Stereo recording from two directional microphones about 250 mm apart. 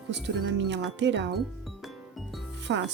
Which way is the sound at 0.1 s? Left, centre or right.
Right.